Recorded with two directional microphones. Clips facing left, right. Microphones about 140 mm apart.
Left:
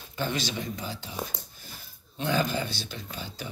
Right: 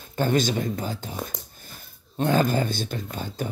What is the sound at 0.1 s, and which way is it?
Speech, 50° right (ahead or behind).